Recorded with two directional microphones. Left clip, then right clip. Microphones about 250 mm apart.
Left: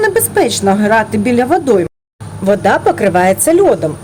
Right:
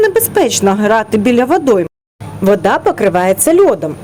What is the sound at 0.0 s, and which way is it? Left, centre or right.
A woman's voice, centre.